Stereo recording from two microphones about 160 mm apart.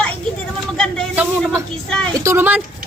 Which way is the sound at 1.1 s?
10° right (ahead or behind).